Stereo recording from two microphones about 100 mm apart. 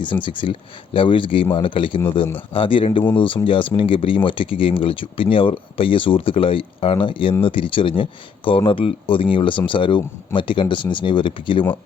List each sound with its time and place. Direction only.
0.0 s speech: 55° left (ahead or behind)